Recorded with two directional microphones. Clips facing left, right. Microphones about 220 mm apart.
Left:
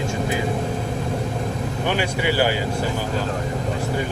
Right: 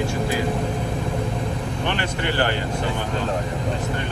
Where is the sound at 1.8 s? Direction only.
10° left (ahead or behind).